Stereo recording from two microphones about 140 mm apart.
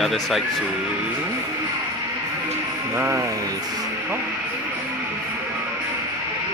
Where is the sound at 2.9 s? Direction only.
20° right (ahead or behind).